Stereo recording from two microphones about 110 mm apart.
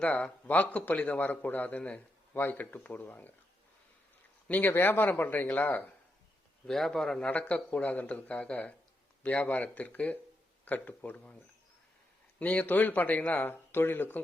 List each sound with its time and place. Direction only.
0.0 s a man's voice: 10° left (ahead or behind)
4.4 s a man's voice: 15° left (ahead or behind)
6.7 s a man's voice: 5° left (ahead or behind)
12.4 s a man's voice: 15° left (ahead or behind)